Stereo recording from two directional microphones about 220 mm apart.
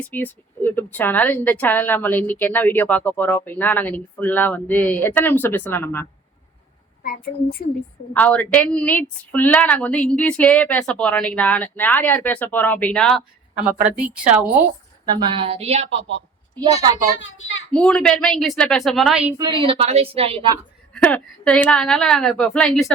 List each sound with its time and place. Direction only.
0.0 s a woman's voice: 10° left (ahead or behind)
7.0 s a woman's voice: 45° left (ahead or behind)
8.1 s a woman's voice: 5° left (ahead or behind)
15.1 s a woman's voice: 25° right (ahead or behind)
17.2 s a child's voice: 60° left (ahead or behind)
17.7 s a woman's voice: 5° left (ahead or behind)
19.6 s a woman's voice: 25° right (ahead or behind)
20.9 s a woman's voice: 5° left (ahead or behind)